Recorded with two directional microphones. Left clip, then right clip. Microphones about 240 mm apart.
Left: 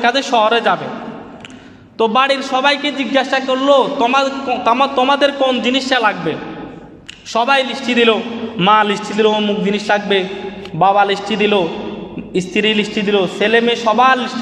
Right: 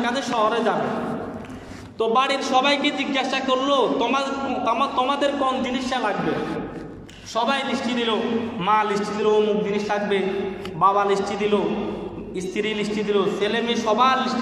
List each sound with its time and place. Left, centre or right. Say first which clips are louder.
0.0 s a man's voice: left 9 dB; left
2.0 s a man's voice: left 7 dB; left
7.3 s a man's voice: left 8 dB; left